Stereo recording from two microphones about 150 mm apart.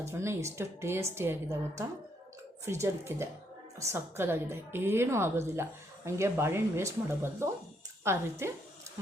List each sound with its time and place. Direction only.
0.0 s a woman's voice: 20° right (ahead or behind)
2.8 s a woman's voice: 15° right (ahead or behind)